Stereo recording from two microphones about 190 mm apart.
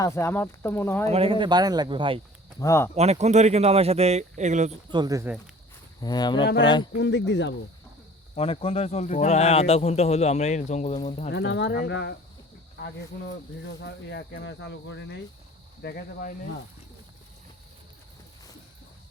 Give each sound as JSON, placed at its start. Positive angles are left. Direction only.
{"t": 0.0, "sound": "speech", "side_deg": 15}
{"t": 1.0, "sound": "speech", "side_deg": -30}
{"t": 2.6, "sound": "speech", "side_deg": 15}
{"t": 2.9, "sound": "speech", "side_deg": -35}
{"t": 4.9, "sound": "speech", "side_deg": -20}
{"t": 6.0, "sound": "speech", "side_deg": 20}
{"t": 6.4, "sound": "speech", "side_deg": 65}
{"t": 8.4, "sound": "speech", "side_deg": 30}
{"t": 11.3, "sound": "speech", "side_deg": 65}
{"t": 13.8, "sound": "speech", "side_deg": 60}
{"t": 15.8, "sound": "speech", "side_deg": 55}